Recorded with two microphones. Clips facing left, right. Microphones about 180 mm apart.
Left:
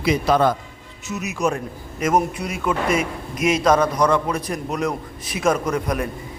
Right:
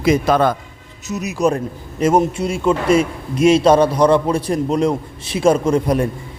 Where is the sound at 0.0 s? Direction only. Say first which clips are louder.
Right 3 dB; 50° right (ahead or behind).